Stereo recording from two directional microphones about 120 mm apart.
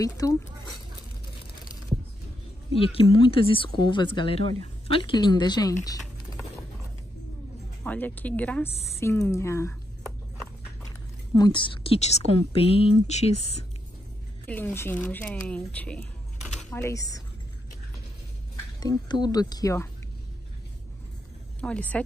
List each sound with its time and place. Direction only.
0.0 s speech: 30° left (ahead or behind)
2.7 s speech: 50° left (ahead or behind); by 6.4 s 30° left (ahead or behind)
7.8 s speech: 15° left (ahead or behind)
9.0 s speech: 25° left (ahead or behind)
11.3 s speech: 40° left (ahead or behind); by 13.6 s 60° left (ahead or behind)
14.4 s speech: 15° left (ahead or behind)
16.7 s speech: 25° left (ahead or behind)
18.8 s speech: 35° left (ahead or behind)
21.5 s speech: 10° left (ahead or behind)